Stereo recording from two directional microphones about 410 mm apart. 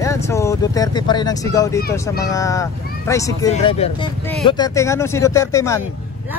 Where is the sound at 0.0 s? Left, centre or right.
Centre.